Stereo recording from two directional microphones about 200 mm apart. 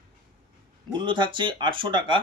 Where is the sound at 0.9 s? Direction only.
25° right (ahead or behind).